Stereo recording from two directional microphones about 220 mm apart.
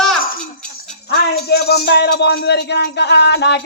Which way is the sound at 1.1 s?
45° left (ahead or behind).